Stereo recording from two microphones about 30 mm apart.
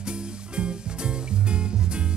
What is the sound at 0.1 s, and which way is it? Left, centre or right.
Music, right.